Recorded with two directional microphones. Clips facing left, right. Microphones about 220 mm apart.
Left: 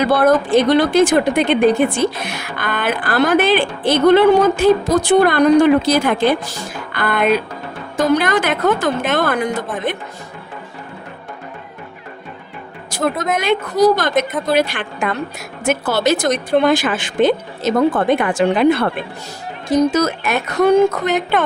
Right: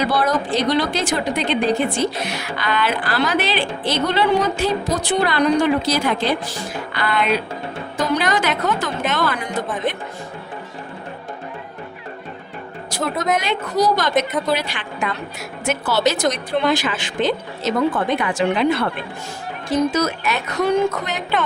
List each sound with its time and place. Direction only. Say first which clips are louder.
0.0 s a woman's voice: left 6 dB; 50° left (ahead or behind)
12.9 s a sound: left 5 dB; 50° left (ahead or behind)
13.4 s a woman's voice: left 6 dB; 50° left (ahead or behind)
19.9 s a woman's voice: left 4 dB; 50° left (ahead or behind)